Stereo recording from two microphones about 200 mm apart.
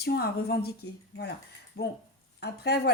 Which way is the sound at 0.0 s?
50° left (ahead or behind).